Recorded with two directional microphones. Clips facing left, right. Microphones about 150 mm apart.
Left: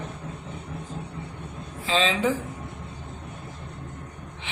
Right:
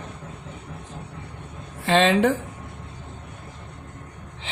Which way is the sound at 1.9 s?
60° right (ahead or behind).